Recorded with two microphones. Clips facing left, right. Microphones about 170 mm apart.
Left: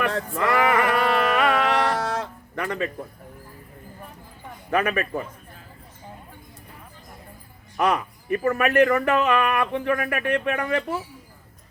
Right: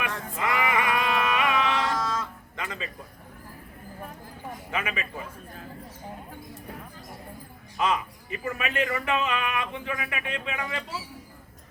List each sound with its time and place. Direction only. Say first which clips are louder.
0.0 s music: left 7 dB; 65° left (ahead or behind)
4.7 s speech: left 10 dB; 60° left (ahead or behind)
7.8 s speech: left 4 dB; 65° left (ahead or behind)